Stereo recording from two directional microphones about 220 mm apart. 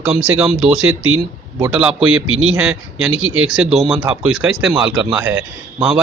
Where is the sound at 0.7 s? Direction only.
70° right (ahead or behind).